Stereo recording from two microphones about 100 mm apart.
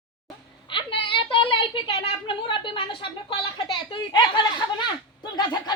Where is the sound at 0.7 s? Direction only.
60° left (ahead or behind).